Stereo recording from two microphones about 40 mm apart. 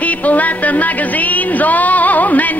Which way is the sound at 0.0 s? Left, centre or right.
Left.